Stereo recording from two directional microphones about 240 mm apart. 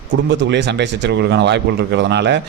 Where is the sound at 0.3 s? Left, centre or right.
Right.